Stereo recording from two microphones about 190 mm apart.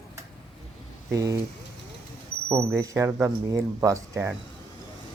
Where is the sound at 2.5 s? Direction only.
15° right (ahead or behind).